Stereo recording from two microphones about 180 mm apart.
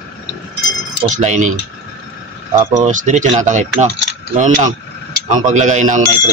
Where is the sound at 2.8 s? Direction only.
45° right (ahead or behind).